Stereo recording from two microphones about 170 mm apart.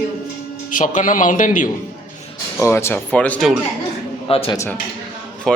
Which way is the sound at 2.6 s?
15° left (ahead or behind).